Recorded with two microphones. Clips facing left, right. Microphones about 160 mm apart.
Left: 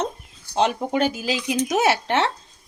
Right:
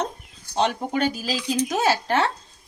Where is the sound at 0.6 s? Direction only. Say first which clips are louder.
Left 2 dB; 25° left (ahead or behind).